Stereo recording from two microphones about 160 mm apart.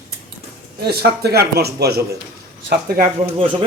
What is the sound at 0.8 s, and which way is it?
A man's voice, 80° right.